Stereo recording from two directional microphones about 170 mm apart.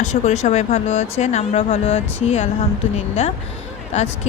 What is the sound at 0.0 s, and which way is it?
Speech, 40° left (ahead or behind).